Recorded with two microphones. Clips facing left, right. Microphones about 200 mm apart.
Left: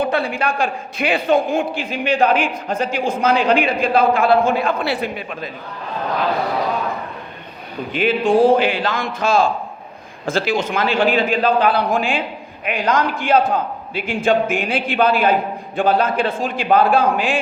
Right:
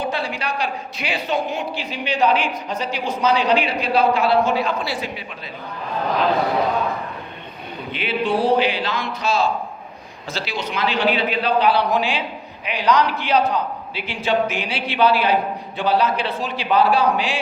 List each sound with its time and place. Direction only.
0.0 s a man's voice: 55° left (ahead or behind)
7.9 s a man's voice: 45° left (ahead or behind)